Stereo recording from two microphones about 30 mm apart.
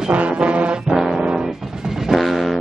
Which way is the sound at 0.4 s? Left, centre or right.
Right.